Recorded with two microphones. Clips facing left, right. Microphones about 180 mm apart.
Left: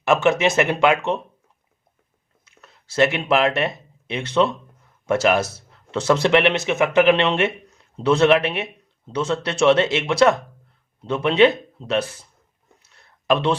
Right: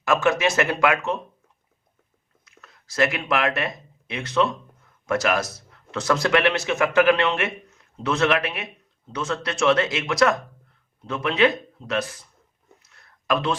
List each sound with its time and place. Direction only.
0.0 s a man's voice: 25° left (ahead or behind)
2.4 s a man's voice: 30° left (ahead or behind)
12.8 s a sound: 30° left (ahead or behind)